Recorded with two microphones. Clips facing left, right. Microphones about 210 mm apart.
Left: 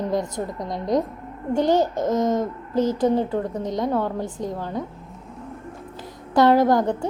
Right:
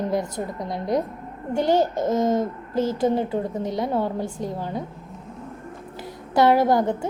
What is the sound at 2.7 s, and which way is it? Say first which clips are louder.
Speech: left 3 dB; 15° left (ahead or behind).